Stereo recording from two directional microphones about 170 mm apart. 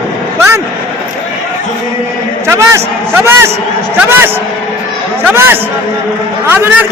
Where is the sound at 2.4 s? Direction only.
15° right (ahead or behind).